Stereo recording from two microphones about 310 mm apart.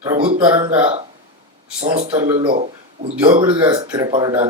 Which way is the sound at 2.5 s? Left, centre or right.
Right.